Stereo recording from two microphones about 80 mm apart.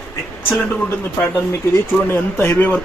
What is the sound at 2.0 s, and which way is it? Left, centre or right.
Speech, left.